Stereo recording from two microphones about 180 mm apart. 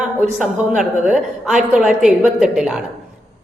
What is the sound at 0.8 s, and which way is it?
A woman's voice, 5° right (ahead or behind).